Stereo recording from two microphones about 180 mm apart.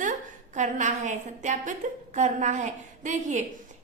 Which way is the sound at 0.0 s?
45° right (ahead or behind).